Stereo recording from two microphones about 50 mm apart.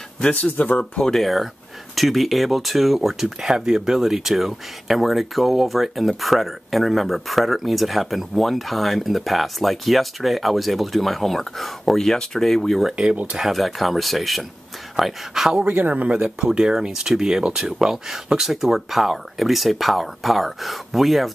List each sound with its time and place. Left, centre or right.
0.3 s speech: left
1.0 s speech: centre
12.9 s speech: right
13.4 s speech: centre
15.6 s speech: right
16.1 s speech: centre